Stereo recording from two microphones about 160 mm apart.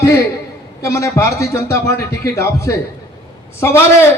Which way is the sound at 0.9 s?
20° left (ahead or behind).